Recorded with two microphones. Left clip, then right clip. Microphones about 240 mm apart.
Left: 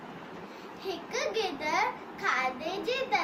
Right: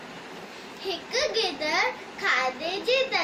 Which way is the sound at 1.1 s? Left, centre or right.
Left.